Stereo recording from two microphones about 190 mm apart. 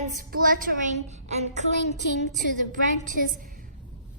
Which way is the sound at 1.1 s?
35° right (ahead or behind).